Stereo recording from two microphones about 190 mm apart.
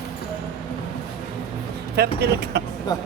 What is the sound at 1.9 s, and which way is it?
Speech, 60° right (ahead or behind).